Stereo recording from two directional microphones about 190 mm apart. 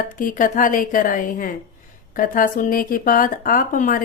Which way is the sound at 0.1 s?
45° left (ahead or behind).